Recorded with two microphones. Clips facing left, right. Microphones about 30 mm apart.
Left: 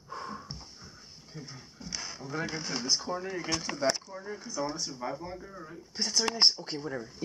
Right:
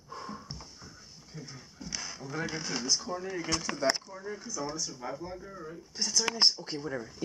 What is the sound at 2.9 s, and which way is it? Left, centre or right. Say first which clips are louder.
Speech: left 2 dB; centre.